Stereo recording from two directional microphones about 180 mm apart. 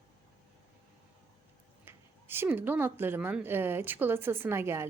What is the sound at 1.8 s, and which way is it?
Speech, 10° right (ahead or behind).